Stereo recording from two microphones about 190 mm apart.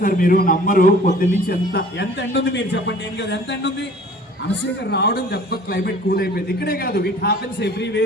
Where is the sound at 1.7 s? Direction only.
65° left (ahead or behind).